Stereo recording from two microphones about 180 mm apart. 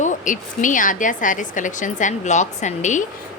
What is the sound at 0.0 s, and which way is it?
A woman's voice, 45° left (ahead or behind).